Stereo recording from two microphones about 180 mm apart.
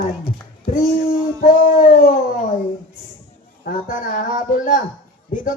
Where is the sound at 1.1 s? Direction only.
50° left (ahead or behind).